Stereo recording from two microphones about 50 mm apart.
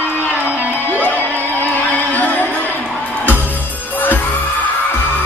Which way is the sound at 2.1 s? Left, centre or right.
Left.